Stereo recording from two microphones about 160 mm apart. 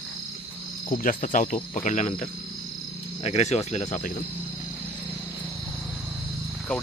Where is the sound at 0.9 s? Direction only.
55° left (ahead or behind).